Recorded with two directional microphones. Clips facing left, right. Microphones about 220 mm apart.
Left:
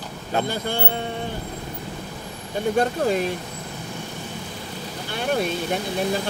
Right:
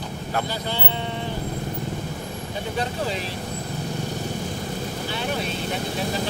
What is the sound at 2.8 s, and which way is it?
Speech, 50° left (ahead or behind).